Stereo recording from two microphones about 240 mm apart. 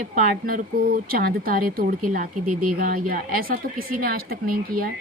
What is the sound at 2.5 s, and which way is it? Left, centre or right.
Speech, right.